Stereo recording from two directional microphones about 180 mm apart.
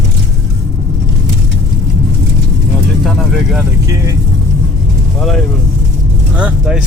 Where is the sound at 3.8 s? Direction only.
20° right (ahead or behind).